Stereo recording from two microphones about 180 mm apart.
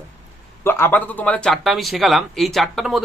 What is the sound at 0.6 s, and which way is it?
Speech, 15° left (ahead or behind).